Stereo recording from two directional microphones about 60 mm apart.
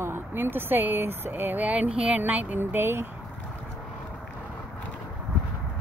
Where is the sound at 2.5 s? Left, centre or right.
Right.